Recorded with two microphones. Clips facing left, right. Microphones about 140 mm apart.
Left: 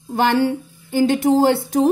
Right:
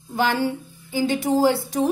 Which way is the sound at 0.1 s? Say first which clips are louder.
Left 5 dB; 60° left (ahead or behind).